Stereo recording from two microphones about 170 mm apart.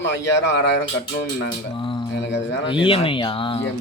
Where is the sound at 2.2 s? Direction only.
90° left.